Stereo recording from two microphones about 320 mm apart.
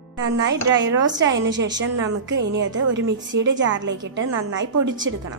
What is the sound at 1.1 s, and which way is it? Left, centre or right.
A woman's voice, right.